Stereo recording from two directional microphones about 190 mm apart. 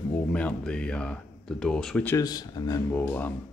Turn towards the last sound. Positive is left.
turn(degrees=10)  # may be behind; listen again after turning